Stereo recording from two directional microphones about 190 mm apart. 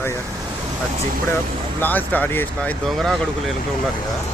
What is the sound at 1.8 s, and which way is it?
Speech, 10° left (ahead or behind).